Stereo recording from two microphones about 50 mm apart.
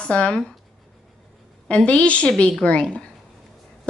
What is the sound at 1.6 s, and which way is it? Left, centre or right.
A woman's voice, left.